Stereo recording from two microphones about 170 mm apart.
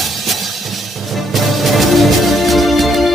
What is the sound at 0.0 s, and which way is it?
Music, centre (ahead or behind).